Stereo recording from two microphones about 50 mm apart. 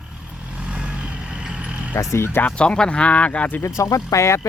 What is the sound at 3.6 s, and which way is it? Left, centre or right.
Speech, left.